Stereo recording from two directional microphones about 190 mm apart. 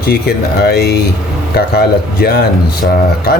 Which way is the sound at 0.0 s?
55° left (ahead or behind).